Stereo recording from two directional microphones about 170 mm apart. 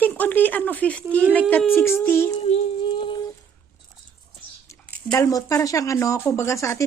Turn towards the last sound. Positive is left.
turn(degrees=15)  # may be behind; listen again after turning